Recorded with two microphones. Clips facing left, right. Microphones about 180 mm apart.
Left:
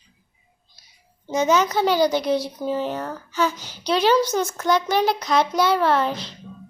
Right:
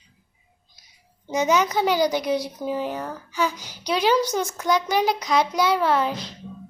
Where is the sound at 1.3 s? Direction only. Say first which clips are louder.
Left 1 dB; 15° right (ahead or behind).